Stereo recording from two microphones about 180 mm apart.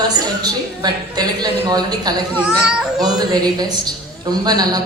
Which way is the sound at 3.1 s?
20° right (ahead or behind).